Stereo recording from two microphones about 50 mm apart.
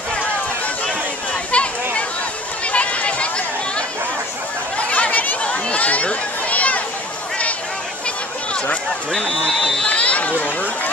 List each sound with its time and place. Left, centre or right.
1.5 s a sound: left
4.7 s chatter: left
9.8 s run: left